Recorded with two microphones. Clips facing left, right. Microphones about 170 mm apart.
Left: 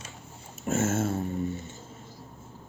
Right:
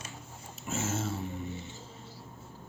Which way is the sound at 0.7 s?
60° left (ahead or behind).